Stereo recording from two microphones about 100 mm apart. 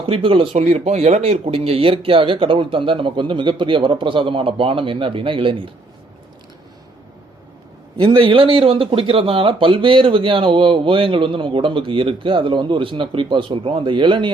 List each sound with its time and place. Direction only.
0.0 s speech: 60° right (ahead or behind)
7.9 s speech: 55° right (ahead or behind)